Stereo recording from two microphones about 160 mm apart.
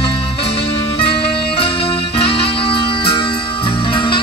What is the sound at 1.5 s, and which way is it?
Music, 35° left (ahead or behind).